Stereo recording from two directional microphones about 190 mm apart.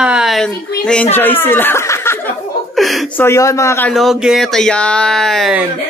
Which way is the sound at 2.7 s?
Centre (ahead or behind).